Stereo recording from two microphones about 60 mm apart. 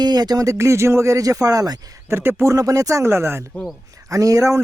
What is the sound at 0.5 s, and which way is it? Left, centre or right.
Speech, right.